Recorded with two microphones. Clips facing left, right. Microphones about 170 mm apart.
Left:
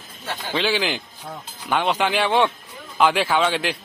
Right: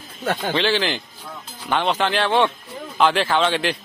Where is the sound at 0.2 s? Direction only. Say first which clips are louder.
Right 8 dB; 55° right (ahead or behind).